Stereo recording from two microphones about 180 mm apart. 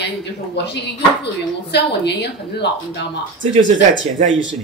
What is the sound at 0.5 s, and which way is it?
A woman's voice, 70° left (ahead or behind).